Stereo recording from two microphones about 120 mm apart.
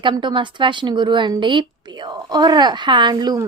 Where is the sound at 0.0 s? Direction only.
40° right (ahead or behind).